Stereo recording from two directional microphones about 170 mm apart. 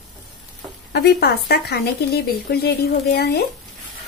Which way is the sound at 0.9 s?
70° left (ahead or behind).